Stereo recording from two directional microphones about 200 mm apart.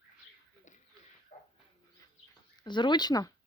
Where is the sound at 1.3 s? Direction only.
35° left (ahead or behind).